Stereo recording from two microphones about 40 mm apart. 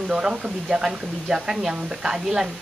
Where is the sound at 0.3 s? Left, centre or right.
Right.